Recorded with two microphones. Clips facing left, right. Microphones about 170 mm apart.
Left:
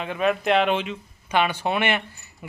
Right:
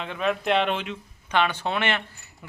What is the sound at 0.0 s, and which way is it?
Speech, 5° left (ahead or behind).